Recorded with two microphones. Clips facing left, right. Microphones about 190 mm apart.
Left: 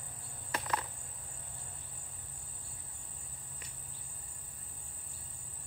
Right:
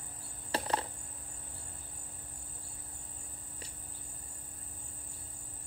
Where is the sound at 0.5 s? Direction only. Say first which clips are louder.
Right 3 dB; 30° right (ahead or behind).